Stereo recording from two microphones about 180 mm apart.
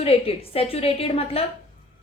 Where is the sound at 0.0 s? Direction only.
35° left (ahead or behind).